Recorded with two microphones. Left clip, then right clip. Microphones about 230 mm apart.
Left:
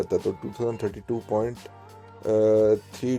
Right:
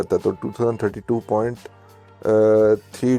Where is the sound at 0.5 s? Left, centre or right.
Right.